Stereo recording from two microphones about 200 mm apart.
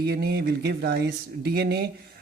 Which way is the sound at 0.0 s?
55° right (ahead or behind).